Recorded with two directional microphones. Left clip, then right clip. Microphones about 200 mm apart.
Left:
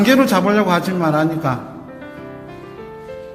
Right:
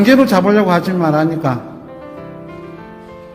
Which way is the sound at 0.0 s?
20° right (ahead or behind).